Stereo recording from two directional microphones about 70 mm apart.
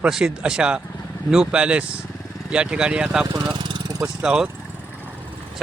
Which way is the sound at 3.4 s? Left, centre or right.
Right.